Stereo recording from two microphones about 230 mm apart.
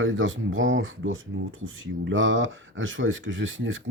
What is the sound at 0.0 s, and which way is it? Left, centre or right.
Speech, right.